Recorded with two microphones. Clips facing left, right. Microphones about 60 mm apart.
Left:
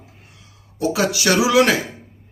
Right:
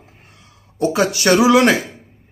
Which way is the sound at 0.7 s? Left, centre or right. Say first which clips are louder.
Right 3 dB; right.